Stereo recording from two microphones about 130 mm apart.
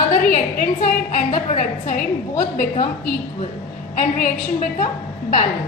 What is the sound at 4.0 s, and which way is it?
Speech, 70° left (ahead or behind).